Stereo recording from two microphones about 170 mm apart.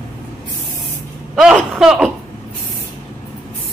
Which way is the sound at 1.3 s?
5° right (ahead or behind).